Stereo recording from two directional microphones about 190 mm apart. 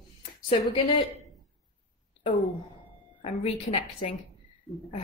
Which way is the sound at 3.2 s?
30° left (ahead or behind).